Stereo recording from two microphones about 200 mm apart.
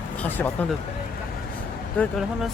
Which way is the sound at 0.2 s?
10° left (ahead or behind).